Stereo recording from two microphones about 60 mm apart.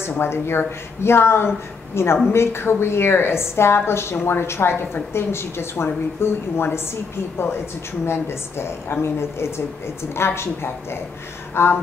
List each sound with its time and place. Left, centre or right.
0.2 s a woman's voice: left
8.0 s a woman's voice: left